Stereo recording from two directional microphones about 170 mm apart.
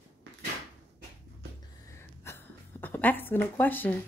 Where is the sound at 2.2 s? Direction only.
15° left (ahead or behind).